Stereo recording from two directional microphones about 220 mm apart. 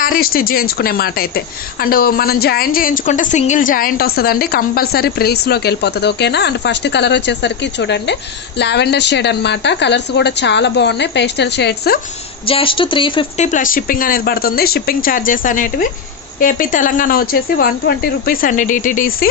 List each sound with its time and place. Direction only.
0.0 s a woman's voice: 40° left (ahead or behind)
12.4 s speech: 25° left (ahead or behind)
13.5 s speech: 40° left (ahead or behind)